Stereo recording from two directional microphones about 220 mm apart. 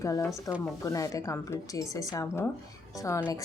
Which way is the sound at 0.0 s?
15° left (ahead or behind).